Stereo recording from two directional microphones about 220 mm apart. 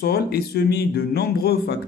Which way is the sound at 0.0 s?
45° left (ahead or behind).